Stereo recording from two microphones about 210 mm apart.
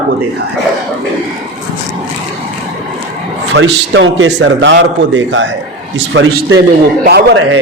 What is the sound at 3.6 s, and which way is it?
A man's voice, 65° right (ahead or behind).